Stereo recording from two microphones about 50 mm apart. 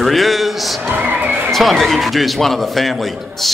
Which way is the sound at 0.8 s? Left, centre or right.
Right.